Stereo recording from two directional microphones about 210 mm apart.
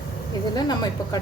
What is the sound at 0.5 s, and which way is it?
Speech, 20° left (ahead or behind).